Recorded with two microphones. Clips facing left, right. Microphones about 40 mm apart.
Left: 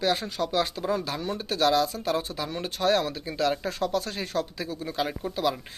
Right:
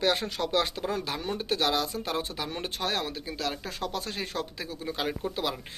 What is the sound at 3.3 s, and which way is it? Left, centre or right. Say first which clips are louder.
Speech: left 10 dB; centre.